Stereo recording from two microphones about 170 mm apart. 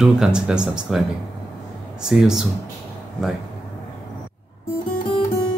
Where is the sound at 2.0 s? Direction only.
Centre (ahead or behind).